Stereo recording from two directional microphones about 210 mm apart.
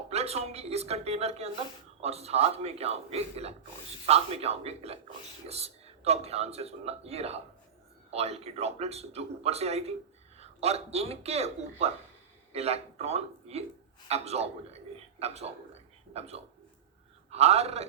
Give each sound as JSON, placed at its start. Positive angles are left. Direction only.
{"t": 0.1, "sound": "a man's voice", "side_deg": -30}